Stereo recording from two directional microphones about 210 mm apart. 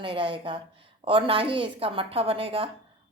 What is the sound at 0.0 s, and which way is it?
Speech, 25° right (ahead or behind).